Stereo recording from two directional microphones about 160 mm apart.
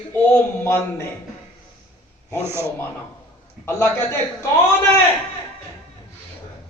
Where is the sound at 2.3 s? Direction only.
15° right (ahead or behind).